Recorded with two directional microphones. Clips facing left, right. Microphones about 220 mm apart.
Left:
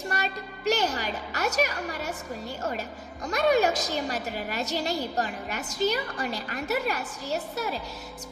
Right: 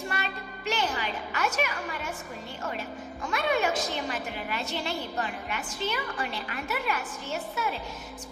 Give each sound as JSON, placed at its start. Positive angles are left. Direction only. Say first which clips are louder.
{"t": 0.1, "sound": "a woman's voice", "louder": "left 3 dB", "side_deg": 40}
{"t": 3.2, "sound": "a woman's voice", "louder": "left 5 dB", "side_deg": 40}